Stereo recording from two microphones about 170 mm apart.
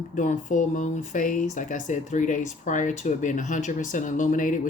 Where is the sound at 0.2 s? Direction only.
45° left (ahead or behind).